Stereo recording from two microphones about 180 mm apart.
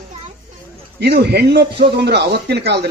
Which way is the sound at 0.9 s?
65° right (ahead or behind).